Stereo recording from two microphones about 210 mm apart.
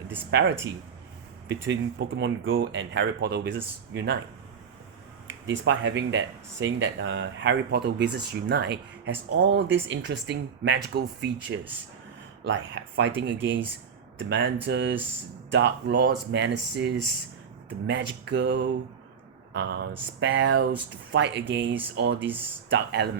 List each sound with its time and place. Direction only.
0.3 s speech: 55° right (ahead or behind)
5.3 s speech: 60° right (ahead or behind)